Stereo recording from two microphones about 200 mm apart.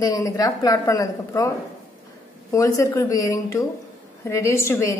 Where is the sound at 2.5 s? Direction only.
15° left (ahead or behind).